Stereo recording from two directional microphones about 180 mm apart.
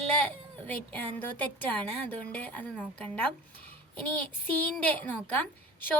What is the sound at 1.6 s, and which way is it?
A child's voice, 10° left (ahead or behind).